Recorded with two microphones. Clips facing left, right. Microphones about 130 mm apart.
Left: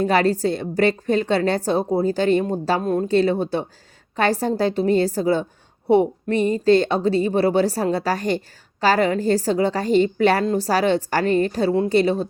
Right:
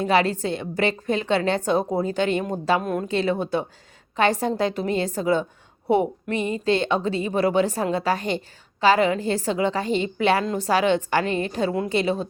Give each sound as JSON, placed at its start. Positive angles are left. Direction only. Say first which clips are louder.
{"t": 0.0, "sound": "a woman's voice", "louder": "left 3 dB", "side_deg": 40}